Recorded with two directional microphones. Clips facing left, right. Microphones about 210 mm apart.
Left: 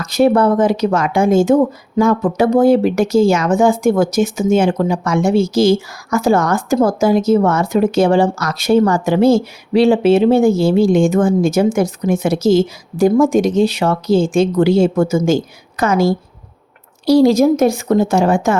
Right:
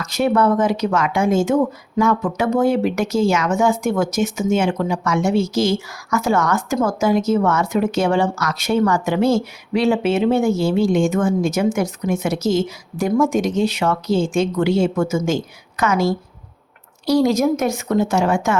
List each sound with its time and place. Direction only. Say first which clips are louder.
0.0 s speech: left 5 dB; 35° left (ahead or behind)